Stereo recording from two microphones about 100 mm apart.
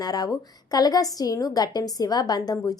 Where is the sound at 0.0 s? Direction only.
40° left (ahead or behind).